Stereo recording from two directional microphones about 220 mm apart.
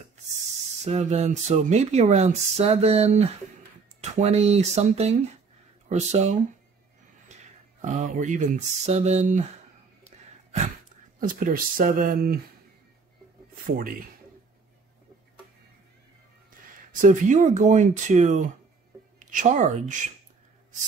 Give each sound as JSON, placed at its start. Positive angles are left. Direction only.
{"t": 0.8, "sound": "speech", "side_deg": -30}
{"t": 7.8, "sound": "speech", "side_deg": -35}
{"t": 10.0, "sound": "a sound", "side_deg": -30}
{"t": 11.1, "sound": "speech", "side_deg": -40}
{"t": 13.7, "sound": "speech", "side_deg": -40}
{"t": 16.9, "sound": "speech", "side_deg": -35}